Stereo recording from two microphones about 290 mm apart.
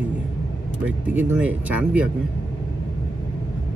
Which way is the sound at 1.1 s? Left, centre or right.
Centre.